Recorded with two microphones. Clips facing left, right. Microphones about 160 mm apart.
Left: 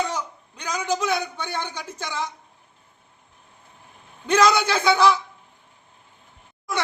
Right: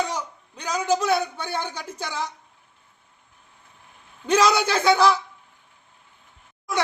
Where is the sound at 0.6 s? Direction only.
5° right (ahead or behind).